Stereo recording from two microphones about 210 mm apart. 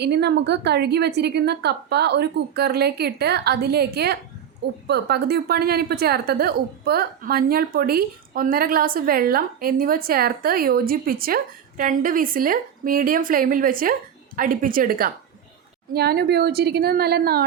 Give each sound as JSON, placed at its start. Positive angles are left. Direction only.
{"t": 0.0, "sound": "a woman's voice", "side_deg": -50}